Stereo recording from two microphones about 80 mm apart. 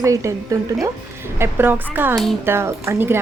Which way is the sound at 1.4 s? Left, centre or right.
Right.